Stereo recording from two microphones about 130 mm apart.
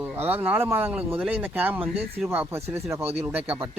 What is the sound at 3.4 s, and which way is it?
Speech, 15° right (ahead or behind).